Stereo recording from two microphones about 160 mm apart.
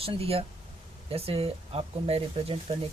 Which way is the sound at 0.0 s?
35° right (ahead or behind).